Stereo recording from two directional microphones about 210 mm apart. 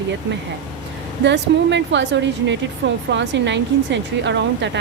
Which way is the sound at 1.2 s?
55° right (ahead or behind).